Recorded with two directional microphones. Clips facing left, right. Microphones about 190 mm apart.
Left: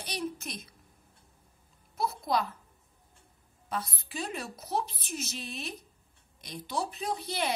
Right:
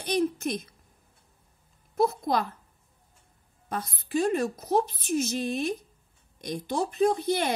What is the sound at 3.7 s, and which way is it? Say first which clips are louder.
A woman's voice: right 6 dB; 55° right (ahead or behind).